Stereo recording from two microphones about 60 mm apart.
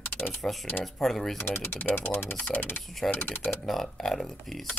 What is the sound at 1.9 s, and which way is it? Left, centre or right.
Speech, left.